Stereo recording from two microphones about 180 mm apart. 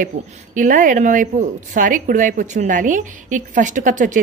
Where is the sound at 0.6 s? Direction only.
45° right (ahead or behind).